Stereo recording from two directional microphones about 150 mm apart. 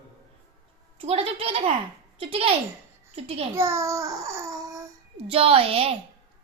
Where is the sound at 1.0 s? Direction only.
40° right (ahead or behind).